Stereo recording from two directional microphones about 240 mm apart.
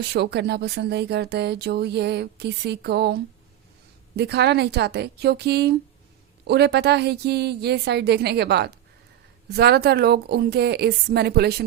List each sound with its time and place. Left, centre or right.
0.1 s speech: right
4.2 s a woman's voice: right